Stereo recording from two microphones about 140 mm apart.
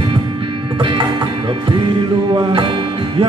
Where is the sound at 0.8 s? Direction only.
35° right (ahead or behind).